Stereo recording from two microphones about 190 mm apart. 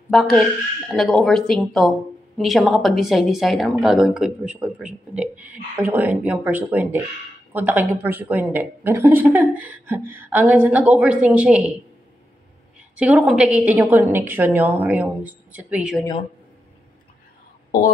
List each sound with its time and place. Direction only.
0.1 s a woman's voice: centre (ahead or behind)
12.9 s a woman's voice: 5° right (ahead or behind)
17.6 s speech: 50° left (ahead or behind)